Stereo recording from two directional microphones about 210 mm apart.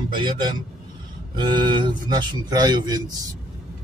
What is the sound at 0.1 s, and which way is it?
Speech, 20° right (ahead or behind).